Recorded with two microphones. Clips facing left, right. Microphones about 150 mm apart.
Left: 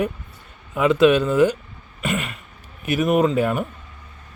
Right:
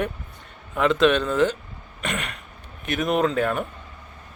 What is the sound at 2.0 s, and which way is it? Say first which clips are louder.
Cough: left 4 dB; 5° left (ahead or behind).